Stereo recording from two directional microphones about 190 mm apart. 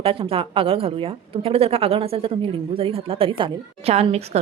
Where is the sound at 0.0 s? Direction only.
30° right (ahead or behind).